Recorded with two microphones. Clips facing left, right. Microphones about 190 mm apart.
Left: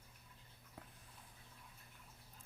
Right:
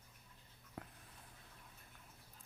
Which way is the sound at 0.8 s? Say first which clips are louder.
Right 6 dB; 60° right (ahead or behind).